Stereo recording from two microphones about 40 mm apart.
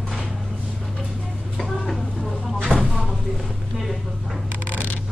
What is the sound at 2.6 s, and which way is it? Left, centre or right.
Vehicle, left.